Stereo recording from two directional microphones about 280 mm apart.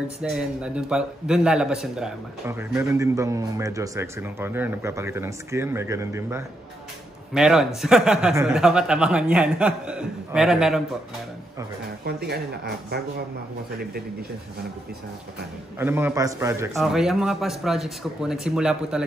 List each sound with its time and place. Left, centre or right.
0.2 s a man's voice: centre
12.1 s speech: right
15.8 s speech: centre